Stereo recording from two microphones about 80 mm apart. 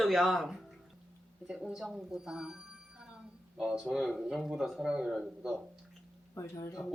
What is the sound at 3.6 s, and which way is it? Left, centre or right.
Speech, centre.